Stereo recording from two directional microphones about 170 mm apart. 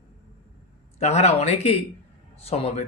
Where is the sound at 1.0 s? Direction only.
40° left (ahead or behind).